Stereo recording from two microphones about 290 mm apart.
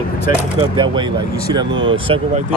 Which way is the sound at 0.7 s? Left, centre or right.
Centre.